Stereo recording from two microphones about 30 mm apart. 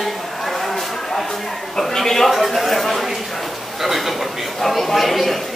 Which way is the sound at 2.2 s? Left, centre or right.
Centre.